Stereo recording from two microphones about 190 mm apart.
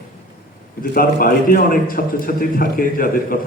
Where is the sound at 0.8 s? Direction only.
50° left (ahead or behind).